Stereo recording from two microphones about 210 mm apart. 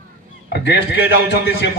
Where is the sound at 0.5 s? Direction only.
50° left (ahead or behind).